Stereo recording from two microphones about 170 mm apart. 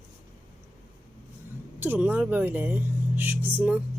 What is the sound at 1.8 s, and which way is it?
Speech, 10° right (ahead or behind).